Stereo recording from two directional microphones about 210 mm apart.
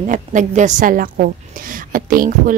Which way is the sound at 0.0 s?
35° right (ahead or behind).